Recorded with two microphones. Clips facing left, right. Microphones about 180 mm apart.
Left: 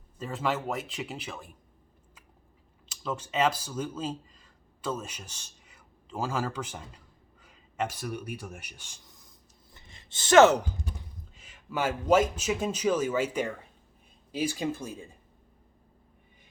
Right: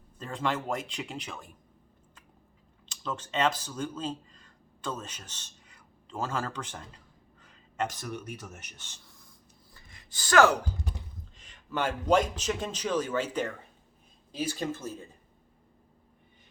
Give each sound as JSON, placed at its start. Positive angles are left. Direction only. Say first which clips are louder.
{"t": 0.2, "sound": "speech", "louder": "left 1 dB", "side_deg": 5}
{"t": 2.9, "sound": "speech", "louder": "left 1 dB", "side_deg": 10}
{"t": 9.7, "sound": "a sound", "louder": "left 1 dB", "side_deg": 25}
{"t": 11.3, "sound": "a man's voice", "louder": "left 1 dB", "side_deg": 5}